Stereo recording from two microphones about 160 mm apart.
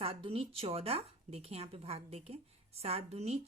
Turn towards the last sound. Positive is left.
turn(degrees=-40)  # may be behind; listen again after turning